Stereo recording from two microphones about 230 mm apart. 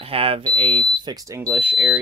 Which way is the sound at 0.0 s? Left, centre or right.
Right.